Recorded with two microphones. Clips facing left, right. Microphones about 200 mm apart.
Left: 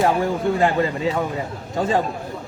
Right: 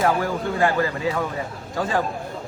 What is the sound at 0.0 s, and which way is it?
A man's voice, 20° left (ahead or behind).